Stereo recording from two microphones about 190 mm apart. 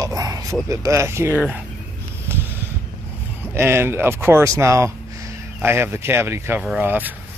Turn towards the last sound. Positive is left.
turn(degrees=-10)  # may be behind; listen again after turning